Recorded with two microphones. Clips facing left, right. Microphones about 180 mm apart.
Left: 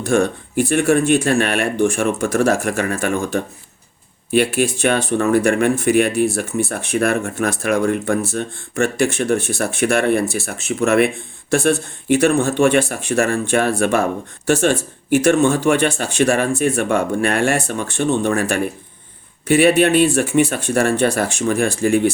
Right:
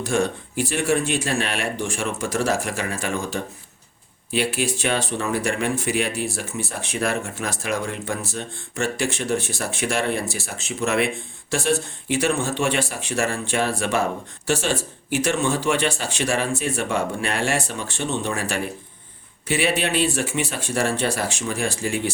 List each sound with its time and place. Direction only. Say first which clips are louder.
0.0 s speech: left 5 dB; 55° left (ahead or behind)